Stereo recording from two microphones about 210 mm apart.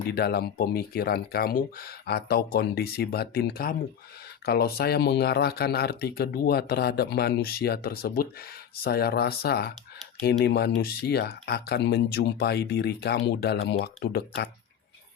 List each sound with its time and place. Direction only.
0.1 s speech: 50° left (ahead or behind)